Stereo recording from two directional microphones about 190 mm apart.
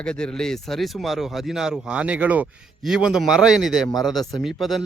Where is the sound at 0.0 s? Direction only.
5° left (ahead or behind).